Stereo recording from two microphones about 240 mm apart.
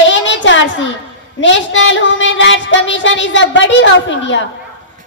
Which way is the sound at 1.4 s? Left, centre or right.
Left.